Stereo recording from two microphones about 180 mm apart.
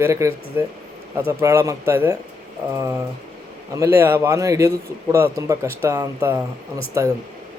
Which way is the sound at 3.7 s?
15° right (ahead or behind).